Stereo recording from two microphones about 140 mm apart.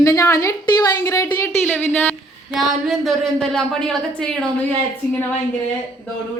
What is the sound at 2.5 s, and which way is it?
A woman's voice, centre (ahead or behind).